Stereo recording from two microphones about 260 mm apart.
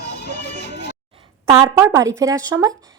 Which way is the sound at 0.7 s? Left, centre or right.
Left.